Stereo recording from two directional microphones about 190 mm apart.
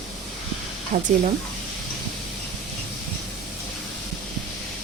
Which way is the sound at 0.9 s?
50° right (ahead or behind).